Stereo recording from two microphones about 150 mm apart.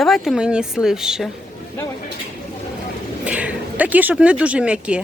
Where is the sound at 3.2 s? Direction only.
10° right (ahead or behind).